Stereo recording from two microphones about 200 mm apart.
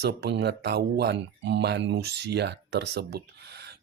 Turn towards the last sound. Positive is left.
turn(degrees=-55)  # may be behind; listen again after turning